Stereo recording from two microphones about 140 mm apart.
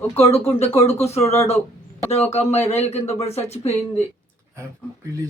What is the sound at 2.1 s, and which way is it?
Speech, 50° left (ahead or behind).